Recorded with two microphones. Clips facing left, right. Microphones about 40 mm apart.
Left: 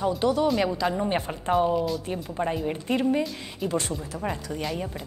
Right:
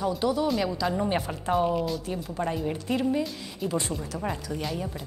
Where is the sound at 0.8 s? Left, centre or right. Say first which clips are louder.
Left 1 dB; centre.